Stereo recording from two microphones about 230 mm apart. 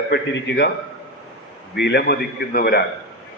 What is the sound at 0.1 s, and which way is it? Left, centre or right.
Speech, left.